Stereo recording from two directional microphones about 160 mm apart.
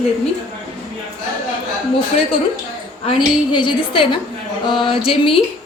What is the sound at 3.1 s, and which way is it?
A woman's voice, 30° left (ahead or behind).